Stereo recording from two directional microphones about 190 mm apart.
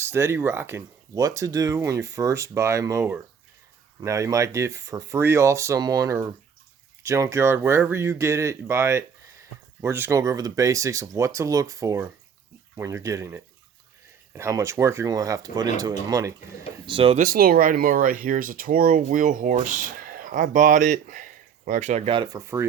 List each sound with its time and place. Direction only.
0.0 s speech: 15° right (ahead or behind); by 17.2 s 30° right (ahead or behind)
17.2 s speech: 50° right (ahead or behind); by 22.4 s 25° right (ahead or behind)
22.4 s speech: 15° right (ahead or behind)